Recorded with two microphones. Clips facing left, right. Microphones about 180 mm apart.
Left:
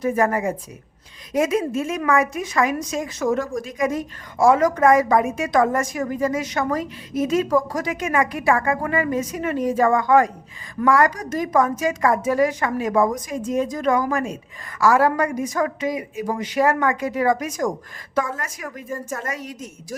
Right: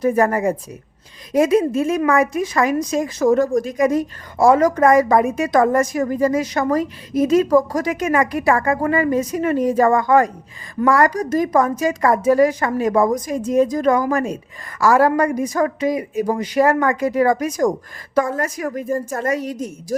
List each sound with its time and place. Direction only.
0.0 s a woman's voice: 40° right (ahead or behind)